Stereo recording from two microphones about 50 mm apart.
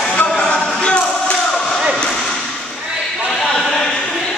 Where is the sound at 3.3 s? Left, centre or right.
Centre.